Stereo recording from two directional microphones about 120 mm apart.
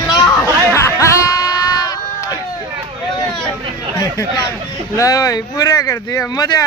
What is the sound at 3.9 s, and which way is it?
Speech, 30° left (ahead or behind).